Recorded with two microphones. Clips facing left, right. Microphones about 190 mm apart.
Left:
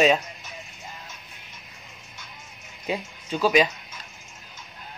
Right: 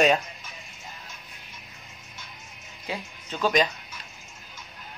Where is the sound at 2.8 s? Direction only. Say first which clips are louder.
Left 5 dB; 20° left (ahead or behind).